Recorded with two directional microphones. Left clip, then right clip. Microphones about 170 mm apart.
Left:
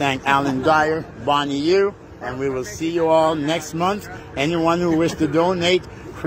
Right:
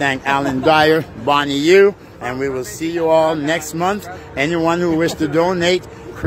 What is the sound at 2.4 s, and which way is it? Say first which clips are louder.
Speech: even; 10° right (ahead or behind).